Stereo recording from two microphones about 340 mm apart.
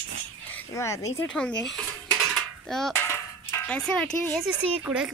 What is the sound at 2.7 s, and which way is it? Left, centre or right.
Speech, centre.